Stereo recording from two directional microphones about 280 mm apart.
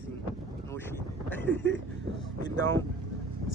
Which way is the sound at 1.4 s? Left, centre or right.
Left.